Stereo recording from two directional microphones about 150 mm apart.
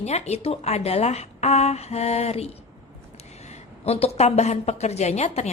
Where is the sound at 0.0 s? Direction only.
45° left (ahead or behind).